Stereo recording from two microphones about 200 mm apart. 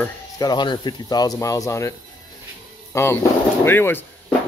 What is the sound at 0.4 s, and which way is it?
Speech, 20° left (ahead or behind).